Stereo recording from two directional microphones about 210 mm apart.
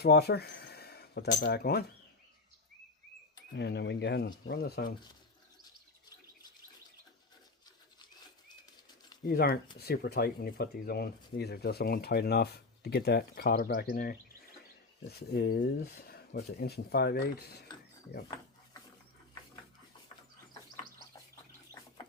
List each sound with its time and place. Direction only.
0.0 s speech: 50° left (ahead or behind)
3.5 s speech: 55° left (ahead or behind)
9.2 s speech: 45° left (ahead or behind)
15.3 s speech: 45° left (ahead or behind)